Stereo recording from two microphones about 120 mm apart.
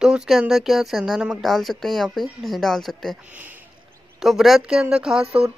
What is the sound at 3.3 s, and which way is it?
Speech, 15° right (ahead or behind).